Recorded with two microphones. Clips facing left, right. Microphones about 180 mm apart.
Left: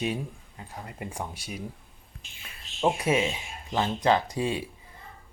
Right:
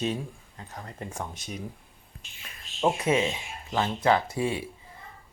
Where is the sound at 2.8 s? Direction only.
10° left (ahead or behind).